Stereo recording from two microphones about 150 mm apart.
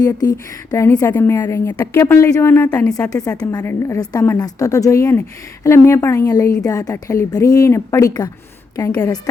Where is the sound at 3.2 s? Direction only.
25° left (ahead or behind).